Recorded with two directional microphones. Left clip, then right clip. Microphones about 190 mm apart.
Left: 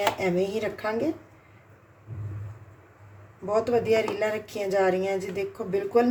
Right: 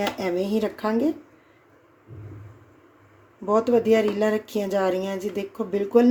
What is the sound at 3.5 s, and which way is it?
Speech, 35° right (ahead or behind).